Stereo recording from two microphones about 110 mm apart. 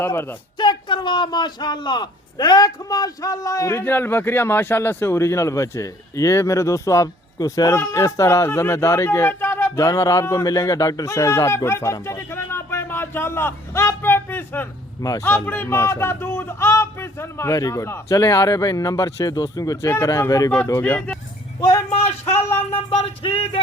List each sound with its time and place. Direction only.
0.6 s a man's voice: 45° left (ahead or behind); by 9.7 s 20° left (ahead or behind)
9.7 s a man's voice: 30° left (ahead or behind)
15.0 s a man's voice: 35° left (ahead or behind)
15.4 s a man's voice: 20° left (ahead or behind)
20.8 s speech: 15° left (ahead or behind)
21.9 s speech: 70° left (ahead or behind)
22.4 s a man's voice: 20° left (ahead or behind)
22.7 s music: 55° left (ahead or behind)